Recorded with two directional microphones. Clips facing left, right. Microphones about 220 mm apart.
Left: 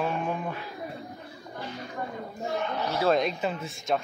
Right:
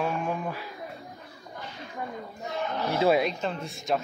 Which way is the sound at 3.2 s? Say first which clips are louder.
Even; 5° left (ahead or behind).